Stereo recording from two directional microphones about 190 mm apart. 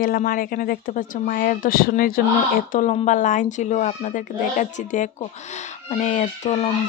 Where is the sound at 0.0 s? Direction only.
45° left (ahead or behind).